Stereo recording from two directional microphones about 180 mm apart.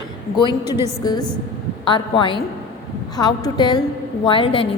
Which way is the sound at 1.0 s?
20° left (ahead or behind).